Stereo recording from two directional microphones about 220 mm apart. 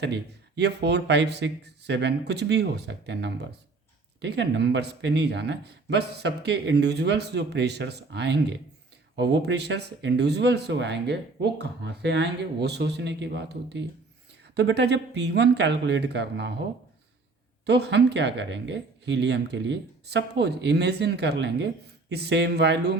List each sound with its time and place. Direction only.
0.0 s speech: 50° right (ahead or behind)
17.7 s speech: 50° right (ahead or behind)